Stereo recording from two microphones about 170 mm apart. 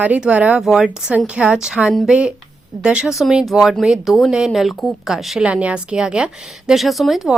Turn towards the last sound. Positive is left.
turn(degrees=0)  # may be behind; listen again after turning